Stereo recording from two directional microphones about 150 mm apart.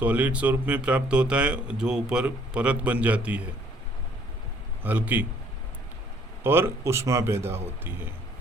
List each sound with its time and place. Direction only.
0.0 s speech: 10° right (ahead or behind)
4.8 s speech: 10° right (ahead or behind)
6.4 s speech: 15° right (ahead or behind)